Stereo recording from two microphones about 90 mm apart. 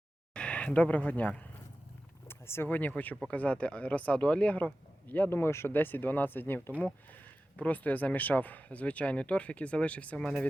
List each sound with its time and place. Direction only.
0.3 s speech: 15° left (ahead or behind)
2.2 s speech: 25° left (ahead or behind); by 10.4 s 10° left (ahead or behind)